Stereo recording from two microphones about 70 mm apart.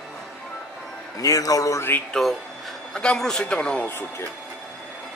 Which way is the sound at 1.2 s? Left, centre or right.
Left.